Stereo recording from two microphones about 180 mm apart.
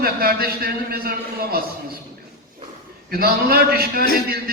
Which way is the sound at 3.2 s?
55° right (ahead or behind).